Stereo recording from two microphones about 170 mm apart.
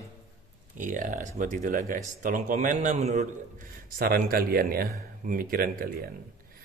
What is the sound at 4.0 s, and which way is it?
Speech, 60° right (ahead or behind).